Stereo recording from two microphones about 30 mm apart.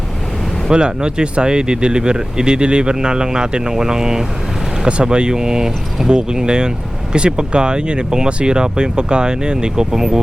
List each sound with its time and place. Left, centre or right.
0.7 s speech: right